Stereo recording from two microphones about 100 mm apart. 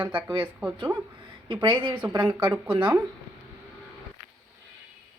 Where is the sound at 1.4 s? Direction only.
55° right (ahead or behind).